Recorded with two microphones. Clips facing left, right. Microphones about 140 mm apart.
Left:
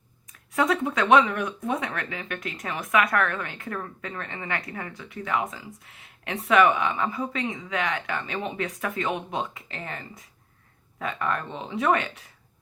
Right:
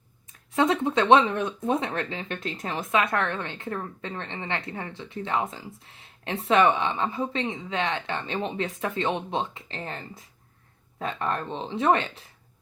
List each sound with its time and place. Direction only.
0.5 s speech: 25° right (ahead or behind)